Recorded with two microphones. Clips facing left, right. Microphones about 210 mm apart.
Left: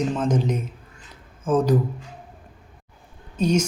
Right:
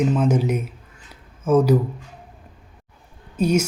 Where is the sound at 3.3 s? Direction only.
10° right (ahead or behind).